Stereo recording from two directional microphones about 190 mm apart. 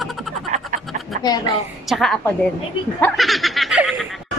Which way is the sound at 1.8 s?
Centre (ahead or behind).